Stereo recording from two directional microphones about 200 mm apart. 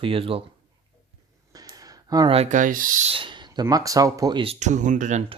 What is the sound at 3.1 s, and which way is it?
Speech, 25° right (ahead or behind).